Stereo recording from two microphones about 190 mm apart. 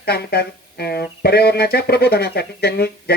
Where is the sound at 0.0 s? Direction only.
55° left (ahead or behind).